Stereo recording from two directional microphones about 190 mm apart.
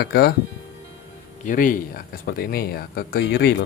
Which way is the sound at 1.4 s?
45° left (ahead or behind).